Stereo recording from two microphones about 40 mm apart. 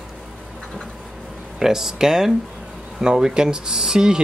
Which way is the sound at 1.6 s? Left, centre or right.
Centre.